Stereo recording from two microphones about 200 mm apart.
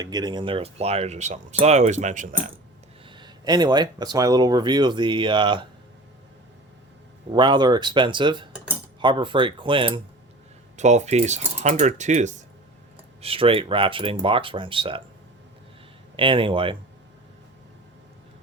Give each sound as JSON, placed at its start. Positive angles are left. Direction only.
{"t": 0.0, "sound": "speech", "side_deg": -20}
{"t": 3.1, "sound": "speech", "side_deg": -20}
{"t": 7.3, "sound": "speech", "side_deg": -25}
{"t": 10.8, "sound": "speech", "side_deg": -35}
{"t": 16.1, "sound": "speech", "side_deg": -25}